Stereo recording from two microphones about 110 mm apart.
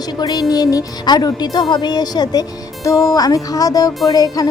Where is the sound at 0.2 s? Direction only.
35° left (ahead or behind).